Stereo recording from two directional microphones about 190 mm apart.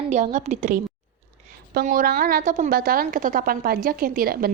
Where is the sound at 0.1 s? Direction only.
40° right (ahead or behind).